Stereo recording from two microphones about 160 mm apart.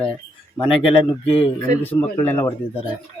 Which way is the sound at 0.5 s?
35° left (ahead or behind).